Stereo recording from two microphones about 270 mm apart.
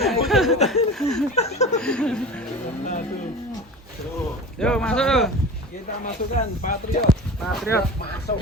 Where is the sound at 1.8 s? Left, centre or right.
Centre.